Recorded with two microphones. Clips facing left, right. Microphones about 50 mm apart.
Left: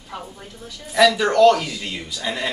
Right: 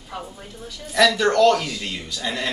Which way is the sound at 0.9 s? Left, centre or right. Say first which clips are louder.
Left 2 dB; centre.